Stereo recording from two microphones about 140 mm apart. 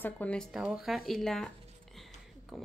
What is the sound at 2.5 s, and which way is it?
Speech, centre (ahead or behind).